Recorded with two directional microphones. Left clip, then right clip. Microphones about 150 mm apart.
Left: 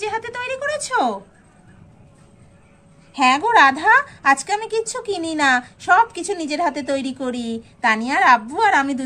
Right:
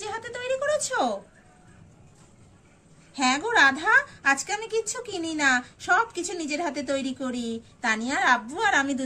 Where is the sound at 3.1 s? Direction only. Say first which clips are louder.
Left 8 dB; 45° left (ahead or behind).